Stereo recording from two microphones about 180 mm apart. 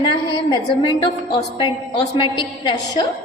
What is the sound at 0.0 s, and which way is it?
A woman's voice, 25° left (ahead or behind).